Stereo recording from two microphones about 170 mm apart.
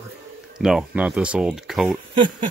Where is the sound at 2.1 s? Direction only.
30° right (ahead or behind).